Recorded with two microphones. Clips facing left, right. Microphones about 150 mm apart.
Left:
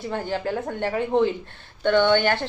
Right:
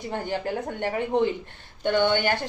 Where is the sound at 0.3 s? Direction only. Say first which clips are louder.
Left 1 dB; 15° right (ahead or behind).